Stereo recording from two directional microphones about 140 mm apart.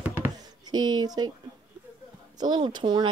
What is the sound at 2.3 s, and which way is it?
Speech, 30° right (ahead or behind).